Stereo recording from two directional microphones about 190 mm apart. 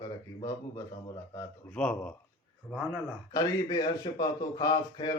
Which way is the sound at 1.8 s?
5° left (ahead or behind).